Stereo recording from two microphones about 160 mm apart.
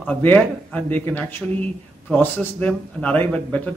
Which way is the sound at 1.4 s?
5° right (ahead or behind).